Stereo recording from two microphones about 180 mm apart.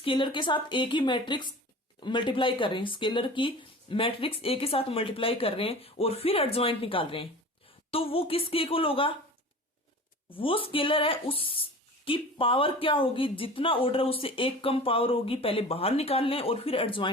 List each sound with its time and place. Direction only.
0.0 s a woman's voice: 30° left (ahead or behind)
10.2 s speech: 30° left (ahead or behind)